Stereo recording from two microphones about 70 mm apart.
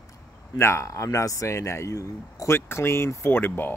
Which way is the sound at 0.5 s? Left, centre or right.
Left.